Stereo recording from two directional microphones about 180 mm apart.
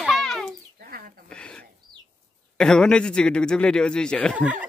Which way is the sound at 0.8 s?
55° right (ahead or behind).